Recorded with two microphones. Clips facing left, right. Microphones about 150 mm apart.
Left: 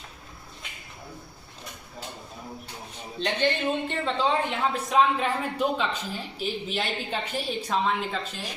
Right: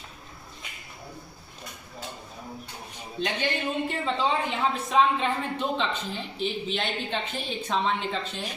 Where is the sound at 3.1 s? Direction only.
10° right (ahead or behind).